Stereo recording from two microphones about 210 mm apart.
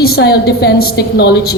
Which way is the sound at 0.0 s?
50° left (ahead or behind).